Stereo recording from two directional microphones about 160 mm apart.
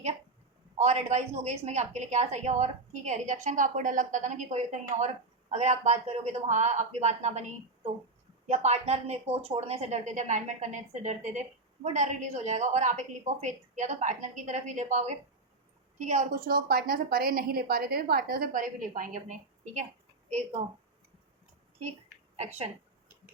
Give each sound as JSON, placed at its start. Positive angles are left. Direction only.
{"t": 0.8, "sound": "a woman's voice", "side_deg": -45}